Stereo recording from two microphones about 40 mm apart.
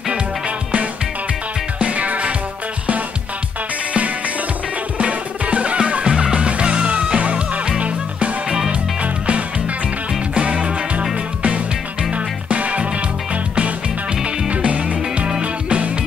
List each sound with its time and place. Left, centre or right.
1.8 s music: right
4.9 s music: right
7.8 s music: right
8.5 s music: right
9.0 s music: right